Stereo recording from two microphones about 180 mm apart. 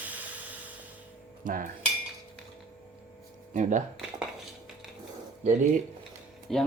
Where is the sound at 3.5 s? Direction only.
45° right (ahead or behind).